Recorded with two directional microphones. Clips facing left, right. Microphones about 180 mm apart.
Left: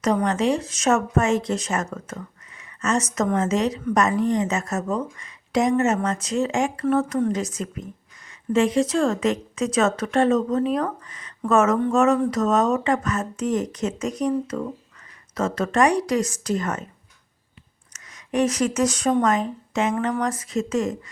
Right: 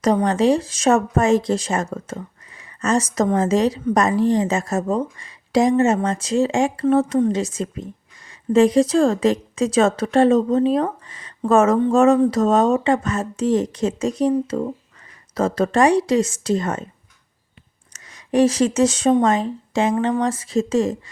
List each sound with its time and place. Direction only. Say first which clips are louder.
0.0 s a woman's voice: right 4 dB; 35° right (ahead or behind)
17.9 s a woman's voice: right 5 dB; 30° right (ahead or behind)